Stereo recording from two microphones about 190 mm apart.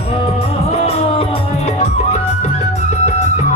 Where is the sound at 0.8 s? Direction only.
30° left (ahead or behind).